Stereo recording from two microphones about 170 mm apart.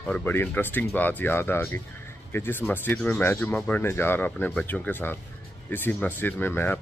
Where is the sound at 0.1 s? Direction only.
15° left (ahead or behind).